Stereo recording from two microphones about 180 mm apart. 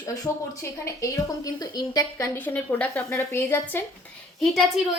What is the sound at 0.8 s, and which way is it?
A woman's voice, 20° left (ahead or behind).